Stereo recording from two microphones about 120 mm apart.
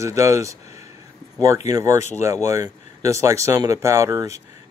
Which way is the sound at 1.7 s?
25° right (ahead or behind).